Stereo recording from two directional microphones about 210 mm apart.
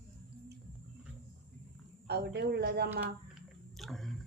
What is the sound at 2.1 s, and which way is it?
Speech, 50° right (ahead or behind).